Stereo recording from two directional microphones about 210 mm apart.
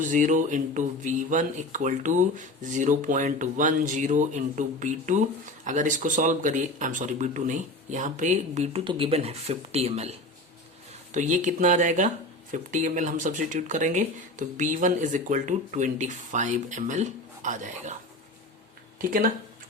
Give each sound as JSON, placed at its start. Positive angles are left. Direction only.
{"t": 0.0, "sound": "speech", "side_deg": -35}
{"t": 18.9, "sound": "speech", "side_deg": -40}